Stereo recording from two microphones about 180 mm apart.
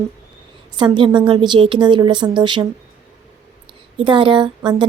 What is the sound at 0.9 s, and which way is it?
Speech, 25° right (ahead or behind).